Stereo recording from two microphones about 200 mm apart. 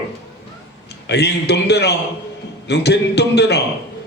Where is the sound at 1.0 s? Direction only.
55° left (ahead or behind).